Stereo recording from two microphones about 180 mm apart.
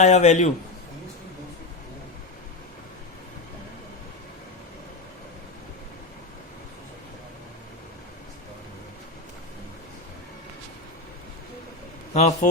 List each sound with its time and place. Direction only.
0.0 s a man's voice: 40° left (ahead or behind)
12.1 s a man's voice: 40° left (ahead or behind)